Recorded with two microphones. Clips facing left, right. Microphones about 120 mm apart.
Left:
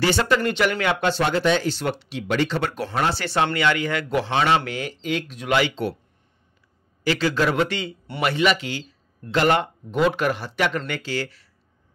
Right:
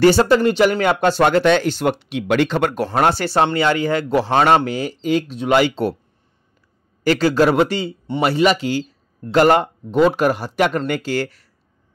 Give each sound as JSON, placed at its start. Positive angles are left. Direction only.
{"t": 0.0, "sound": "speech", "side_deg": -40}
{"t": 1.2, "sound": "speech", "side_deg": -65}
{"t": 1.8, "sound": "speech", "side_deg": -50}
{"t": 7.0, "sound": "speech", "side_deg": -45}